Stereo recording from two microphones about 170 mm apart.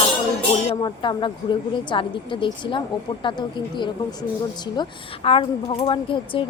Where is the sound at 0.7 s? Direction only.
25° left (ahead or behind).